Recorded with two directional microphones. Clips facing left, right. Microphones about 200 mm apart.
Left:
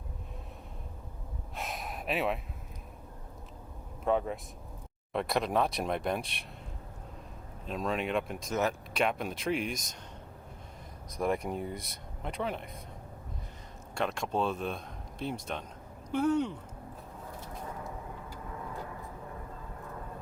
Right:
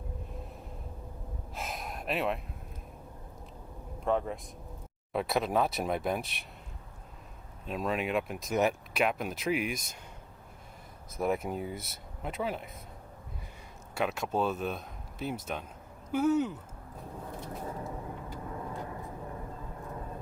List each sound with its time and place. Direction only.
1.5 s a sound: centre (ahead or behind)
4.0 s speech: centre (ahead or behind)
7.7 s speech: 5° right (ahead or behind)
11.2 s speech: 5° right (ahead or behind)
13.9 s speech: 5° right (ahead or behind)